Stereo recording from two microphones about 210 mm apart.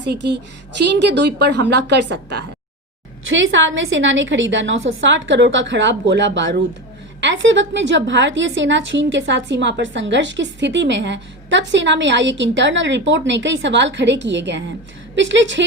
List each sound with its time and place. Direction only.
0.0 s a woman's voice: 55° right (ahead or behind)